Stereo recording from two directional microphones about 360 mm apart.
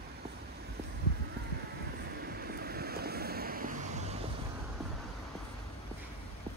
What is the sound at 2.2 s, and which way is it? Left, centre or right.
Vehicle, right.